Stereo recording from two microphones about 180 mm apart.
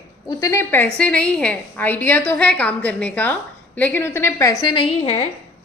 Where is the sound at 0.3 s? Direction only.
20° left (ahead or behind).